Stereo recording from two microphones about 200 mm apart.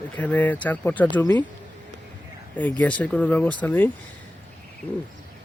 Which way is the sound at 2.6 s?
5° left (ahead or behind).